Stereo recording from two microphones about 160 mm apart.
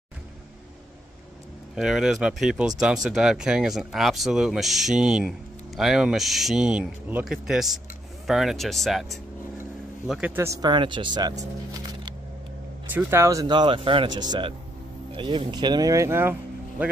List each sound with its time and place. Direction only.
1.8 s speech: 5° right (ahead or behind)
10.3 s speech: 20° right (ahead or behind)
12.9 s speech: 15° right (ahead or behind)